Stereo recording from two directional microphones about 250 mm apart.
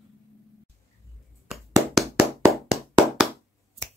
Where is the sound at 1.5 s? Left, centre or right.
Centre.